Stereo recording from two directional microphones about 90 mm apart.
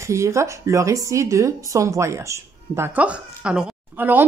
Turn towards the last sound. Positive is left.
turn(degrees=-20)  # may be behind; listen again after turning